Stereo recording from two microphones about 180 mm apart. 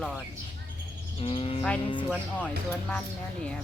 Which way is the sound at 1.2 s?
35° left (ahead or behind).